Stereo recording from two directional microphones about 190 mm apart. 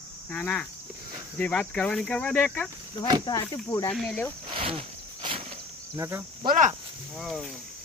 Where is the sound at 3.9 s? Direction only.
Centre (ahead or behind).